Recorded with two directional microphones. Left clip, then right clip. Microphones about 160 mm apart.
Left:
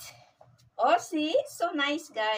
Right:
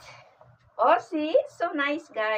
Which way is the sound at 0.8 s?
30° left (ahead or behind).